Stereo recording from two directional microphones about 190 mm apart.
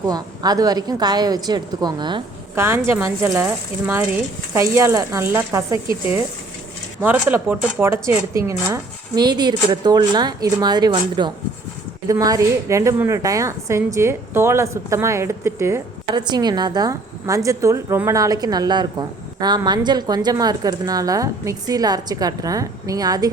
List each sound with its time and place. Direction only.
0.0 s a woman's voice: 20° right (ahead or behind)
2.6 s speech: 15° right (ahead or behind)
7.0 s a woman's voice: 10° right (ahead or behind)